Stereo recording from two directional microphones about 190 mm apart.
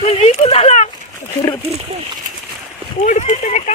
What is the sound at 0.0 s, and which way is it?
Speech, 35° left (ahead or behind).